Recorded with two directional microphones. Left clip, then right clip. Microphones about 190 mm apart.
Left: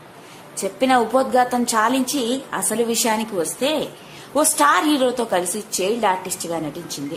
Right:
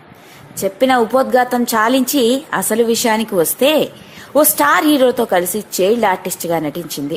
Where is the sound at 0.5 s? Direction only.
20° right (ahead or behind).